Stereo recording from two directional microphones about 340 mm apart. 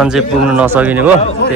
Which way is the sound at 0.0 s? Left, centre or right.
Centre.